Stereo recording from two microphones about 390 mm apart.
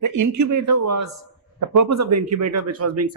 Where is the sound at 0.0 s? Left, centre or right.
Right.